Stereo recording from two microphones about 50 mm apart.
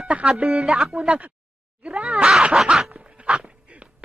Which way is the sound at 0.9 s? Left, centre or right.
Right.